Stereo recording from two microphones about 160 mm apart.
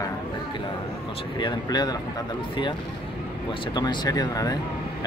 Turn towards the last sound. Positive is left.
turn(degrees=25)  # may be behind; listen again after turning